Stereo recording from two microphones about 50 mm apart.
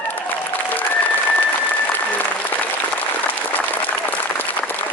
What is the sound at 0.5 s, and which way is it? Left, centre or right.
Applause, left.